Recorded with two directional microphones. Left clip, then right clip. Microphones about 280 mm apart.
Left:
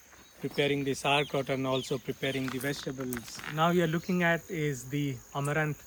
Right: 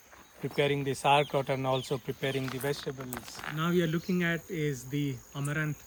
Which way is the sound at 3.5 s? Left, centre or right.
Centre.